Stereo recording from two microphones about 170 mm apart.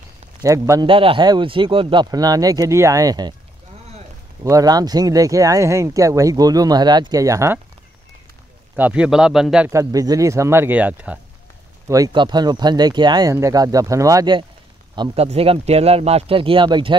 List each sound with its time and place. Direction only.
0.4 s speech: 20° right (ahead or behind)
4.4 s speech: 20° right (ahead or behind)
8.7 s speech: 10° right (ahead or behind)
9.7 s speech: 20° right (ahead or behind)
11.9 s speech: 25° right (ahead or behind)
15.0 s speech: 35° right (ahead or behind)